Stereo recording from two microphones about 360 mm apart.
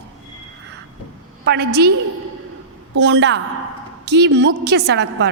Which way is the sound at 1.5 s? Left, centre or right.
Right.